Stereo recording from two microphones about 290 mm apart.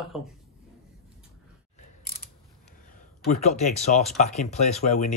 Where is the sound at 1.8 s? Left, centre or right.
Left.